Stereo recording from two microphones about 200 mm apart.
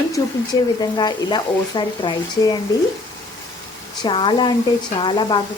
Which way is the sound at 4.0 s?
25° left (ahead or behind).